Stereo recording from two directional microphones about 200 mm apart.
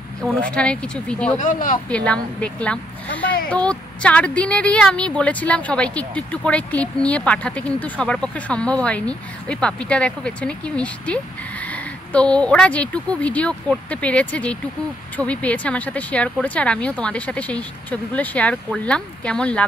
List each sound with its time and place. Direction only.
0.2 s speech: 5° left (ahead or behind)
1.4 s speech: 40° left (ahead or behind)
1.9 s speech: 5° left (ahead or behind)